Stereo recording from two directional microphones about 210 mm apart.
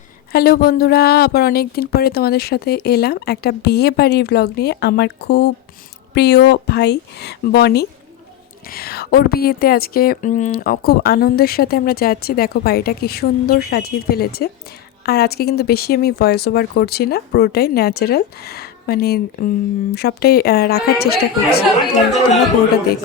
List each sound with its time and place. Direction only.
0.3 s a woman's voice: 45° left (ahead or behind)